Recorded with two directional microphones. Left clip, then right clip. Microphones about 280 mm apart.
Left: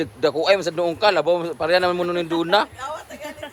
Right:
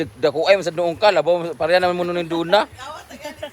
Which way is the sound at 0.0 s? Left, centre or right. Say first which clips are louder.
Right 1 dB; centre.